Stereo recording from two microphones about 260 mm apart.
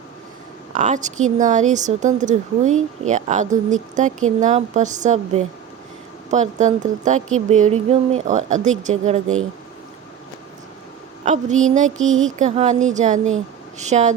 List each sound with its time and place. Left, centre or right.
0.7 s a woman's voice: right
11.3 s speech: right
11.9 s a sound: right
12.4 s speech: right